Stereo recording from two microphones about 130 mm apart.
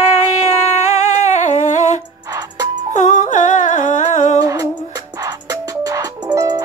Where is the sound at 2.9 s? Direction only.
75° left (ahead or behind).